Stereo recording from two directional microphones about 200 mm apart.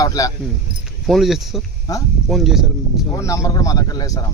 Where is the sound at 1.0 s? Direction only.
Centre (ahead or behind).